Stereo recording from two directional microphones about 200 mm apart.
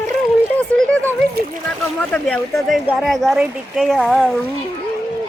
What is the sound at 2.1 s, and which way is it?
Speech, 5° left (ahead or behind).